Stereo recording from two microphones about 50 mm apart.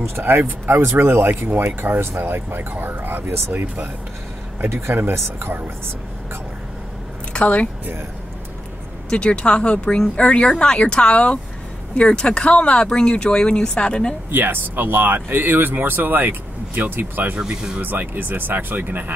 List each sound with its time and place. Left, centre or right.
0.0 s speech: right
7.3 s speech: left
9.1 s speech: centre
14.3 s speech: right
17.4 s speech: centre
17.7 s speech: right